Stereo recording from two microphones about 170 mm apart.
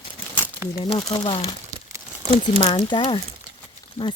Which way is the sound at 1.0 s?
20° left (ahead or behind).